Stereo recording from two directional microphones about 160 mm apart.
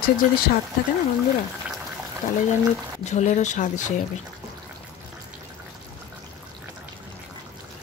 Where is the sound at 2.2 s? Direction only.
50° left (ahead or behind).